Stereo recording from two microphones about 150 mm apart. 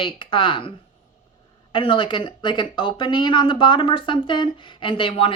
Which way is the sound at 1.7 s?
35° left (ahead or behind).